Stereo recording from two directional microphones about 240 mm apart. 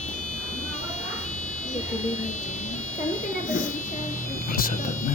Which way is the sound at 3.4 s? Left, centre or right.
Left.